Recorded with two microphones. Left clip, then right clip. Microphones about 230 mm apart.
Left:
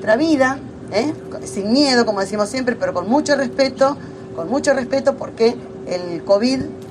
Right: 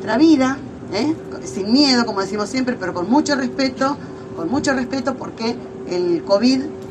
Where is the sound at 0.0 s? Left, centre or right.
Left.